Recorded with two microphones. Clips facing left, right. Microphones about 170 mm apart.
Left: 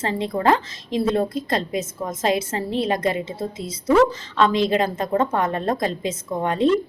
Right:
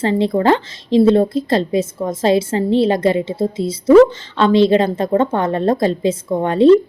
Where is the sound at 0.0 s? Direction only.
30° right (ahead or behind).